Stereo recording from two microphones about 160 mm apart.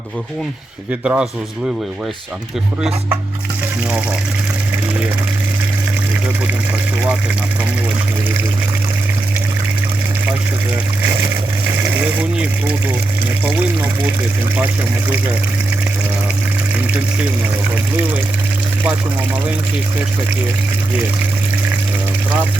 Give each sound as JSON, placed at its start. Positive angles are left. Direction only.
{"t": 0.9, "sound": "speech", "side_deg": -10}
{"t": 11.8, "sound": "speech", "side_deg": -10}